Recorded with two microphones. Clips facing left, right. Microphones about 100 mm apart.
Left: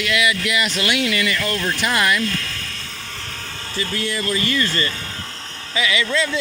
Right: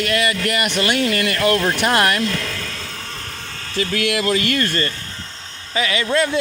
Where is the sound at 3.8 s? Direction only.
75° right (ahead or behind); by 4.9 s 55° right (ahead or behind).